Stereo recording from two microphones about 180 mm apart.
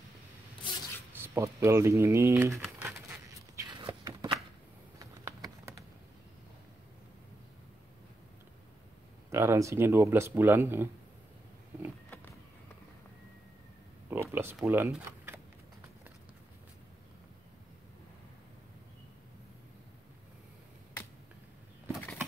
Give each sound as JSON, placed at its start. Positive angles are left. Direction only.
{"t": 1.1, "sound": "typing", "side_deg": -15}
{"t": 4.9, "sound": "a sound", "side_deg": -20}
{"t": 9.3, "sound": "speech", "side_deg": -15}
{"t": 14.3, "sound": "speech", "side_deg": -10}